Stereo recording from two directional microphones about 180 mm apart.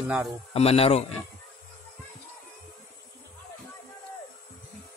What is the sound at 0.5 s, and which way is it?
Speech, 35° left (ahead or behind).